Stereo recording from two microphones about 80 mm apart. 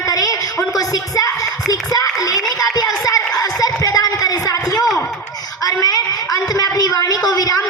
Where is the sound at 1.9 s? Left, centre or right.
Left.